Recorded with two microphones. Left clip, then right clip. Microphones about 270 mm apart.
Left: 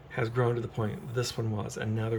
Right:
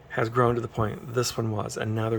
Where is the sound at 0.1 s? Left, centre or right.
Centre.